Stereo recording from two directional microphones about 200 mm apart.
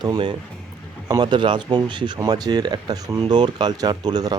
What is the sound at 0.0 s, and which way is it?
Speech, 20° right (ahead or behind).